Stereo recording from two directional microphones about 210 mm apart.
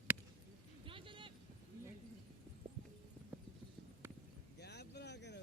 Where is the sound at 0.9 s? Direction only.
25° right (ahead or behind).